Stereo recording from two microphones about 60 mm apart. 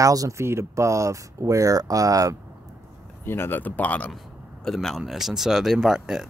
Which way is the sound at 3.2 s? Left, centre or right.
Left.